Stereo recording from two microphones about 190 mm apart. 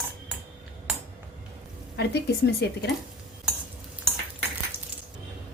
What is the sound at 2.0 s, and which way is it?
Speech, 60° left (ahead or behind).